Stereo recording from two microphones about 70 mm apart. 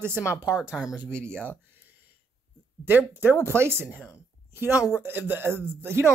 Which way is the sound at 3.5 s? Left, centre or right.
Right.